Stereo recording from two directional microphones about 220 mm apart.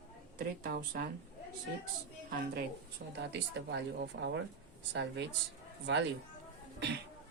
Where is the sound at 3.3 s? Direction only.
50° right (ahead or behind).